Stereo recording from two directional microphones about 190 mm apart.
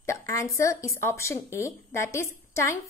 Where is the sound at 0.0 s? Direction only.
15° left (ahead or behind).